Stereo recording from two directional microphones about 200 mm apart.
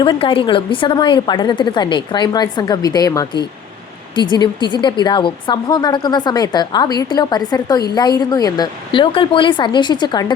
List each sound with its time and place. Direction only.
0.0 s speech: 25° left (ahead or behind)